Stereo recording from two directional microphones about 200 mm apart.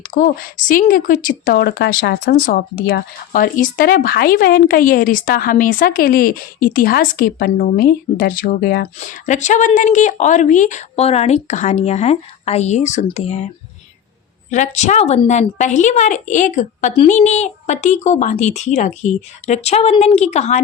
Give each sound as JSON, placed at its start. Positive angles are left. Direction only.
{"t": 0.0, "sound": "a woman's voice", "side_deg": 45}
{"t": 9.0, "sound": "a woman's voice", "side_deg": 35}
{"t": 14.5, "sound": "a woman's voice", "side_deg": 35}